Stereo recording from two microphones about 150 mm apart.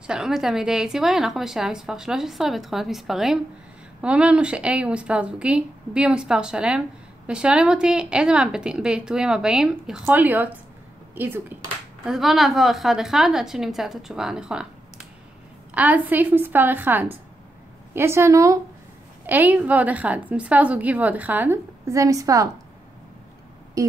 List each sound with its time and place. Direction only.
0.0 s a woman's voice: 5° right (ahead or behind)
12.1 s a woman's voice: centre (ahead or behind)
15.7 s a woman's voice: 10° right (ahead or behind)
23.8 s a sound: 20° right (ahead or behind)